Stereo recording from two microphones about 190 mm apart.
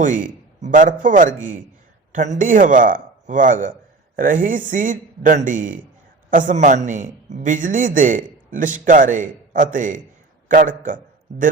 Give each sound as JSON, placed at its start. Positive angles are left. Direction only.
{"t": 0.0, "sound": "a man's voice", "side_deg": -45}